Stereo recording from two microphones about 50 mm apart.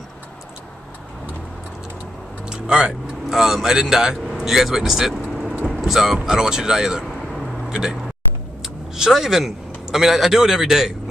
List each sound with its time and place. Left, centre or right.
2.5 s vehicle: centre
3.3 s a man's voice: centre
5.3 s vehicle: centre
6.2 s a man's voice: centre